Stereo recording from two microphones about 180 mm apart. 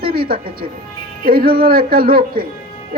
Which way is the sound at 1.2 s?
55° right (ahead or behind).